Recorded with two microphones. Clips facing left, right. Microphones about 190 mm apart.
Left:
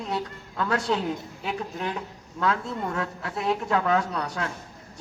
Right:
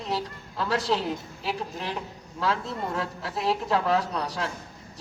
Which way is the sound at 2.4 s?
30° right (ahead or behind).